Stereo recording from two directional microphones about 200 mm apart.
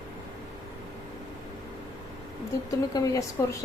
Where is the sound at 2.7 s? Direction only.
15° left (ahead or behind).